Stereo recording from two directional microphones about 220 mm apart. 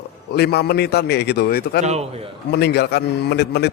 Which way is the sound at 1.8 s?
30° right (ahead or behind).